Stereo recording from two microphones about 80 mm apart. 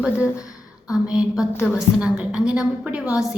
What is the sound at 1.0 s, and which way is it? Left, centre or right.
A woman's voice, centre.